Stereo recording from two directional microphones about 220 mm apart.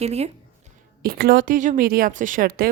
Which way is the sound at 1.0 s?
45° right (ahead or behind).